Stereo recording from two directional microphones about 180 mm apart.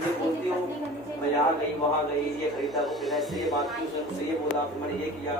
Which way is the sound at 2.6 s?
Centre (ahead or behind).